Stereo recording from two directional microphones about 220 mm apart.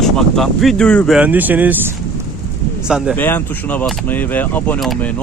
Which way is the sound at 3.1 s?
10° left (ahead or behind).